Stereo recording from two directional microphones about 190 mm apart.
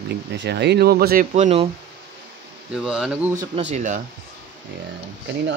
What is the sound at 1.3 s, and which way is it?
Speech, 35° right (ahead or behind).